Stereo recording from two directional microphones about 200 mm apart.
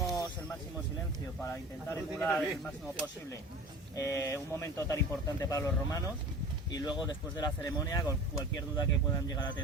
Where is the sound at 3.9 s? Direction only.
15° left (ahead or behind).